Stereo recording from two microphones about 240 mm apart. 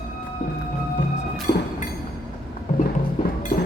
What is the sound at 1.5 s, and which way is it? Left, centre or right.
Train, left.